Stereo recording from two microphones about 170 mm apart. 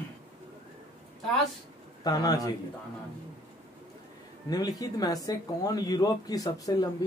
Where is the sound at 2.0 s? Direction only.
20° left (ahead or behind).